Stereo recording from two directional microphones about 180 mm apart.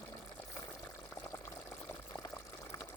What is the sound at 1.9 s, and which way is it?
Water, 15° left (ahead or behind).